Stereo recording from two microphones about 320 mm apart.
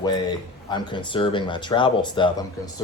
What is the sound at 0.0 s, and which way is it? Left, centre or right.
Speech, centre.